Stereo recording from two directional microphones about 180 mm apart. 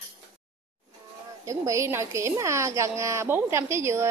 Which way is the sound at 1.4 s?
15° right (ahead or behind).